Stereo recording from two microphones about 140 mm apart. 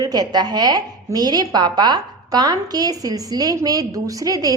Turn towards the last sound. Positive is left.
turn(degrees=-25)  # may be behind; listen again after turning